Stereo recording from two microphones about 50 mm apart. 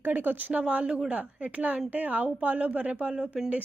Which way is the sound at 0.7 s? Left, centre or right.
Right.